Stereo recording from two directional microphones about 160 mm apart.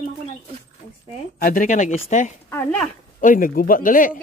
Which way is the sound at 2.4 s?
15° left (ahead or behind).